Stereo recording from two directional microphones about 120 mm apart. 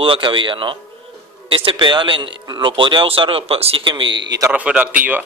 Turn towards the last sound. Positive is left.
turn(degrees=-15)  # may be behind; listen again after turning